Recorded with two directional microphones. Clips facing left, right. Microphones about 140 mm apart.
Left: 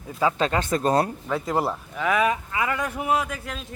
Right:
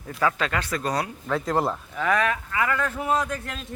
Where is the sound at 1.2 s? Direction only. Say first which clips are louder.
Even; 5° left (ahead or behind).